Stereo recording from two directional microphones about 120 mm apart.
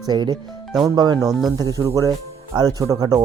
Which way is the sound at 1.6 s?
30° right (ahead or behind).